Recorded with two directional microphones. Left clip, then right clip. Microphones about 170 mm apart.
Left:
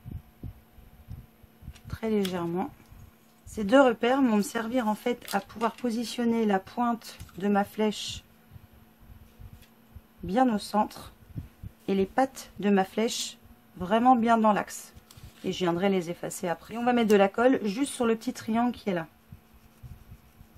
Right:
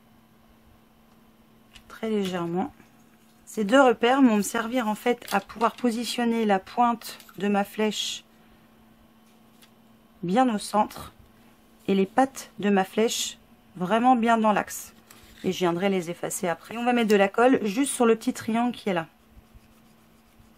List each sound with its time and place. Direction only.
1.9 s speech: 5° right (ahead or behind)
10.2 s a woman's voice: 15° right (ahead or behind)